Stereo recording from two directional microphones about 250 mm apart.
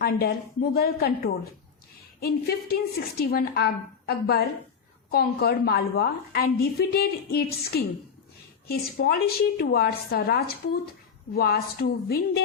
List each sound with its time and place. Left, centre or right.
0.0 s a woman's voice: left